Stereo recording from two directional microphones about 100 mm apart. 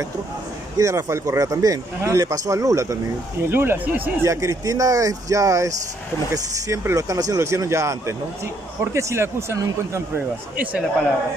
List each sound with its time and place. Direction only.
0.7 s a man's voice: 30° right (ahead or behind); by 4.1 s 15° right (ahead or behind)
4.2 s a man's voice: 30° right (ahead or behind)